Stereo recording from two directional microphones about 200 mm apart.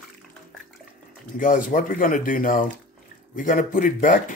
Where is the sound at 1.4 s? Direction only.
40° left (ahead or behind).